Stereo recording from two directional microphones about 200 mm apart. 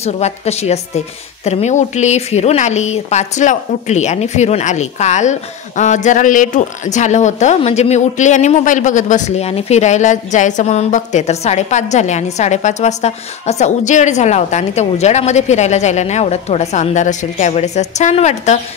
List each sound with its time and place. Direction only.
0.0 s a woman's voice: 30° left (ahead or behind)